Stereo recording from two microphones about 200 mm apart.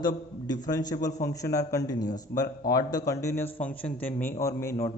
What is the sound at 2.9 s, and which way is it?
A man's voice, 15° left (ahead or behind).